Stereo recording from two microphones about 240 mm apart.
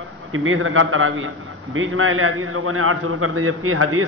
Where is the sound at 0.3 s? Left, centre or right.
Right.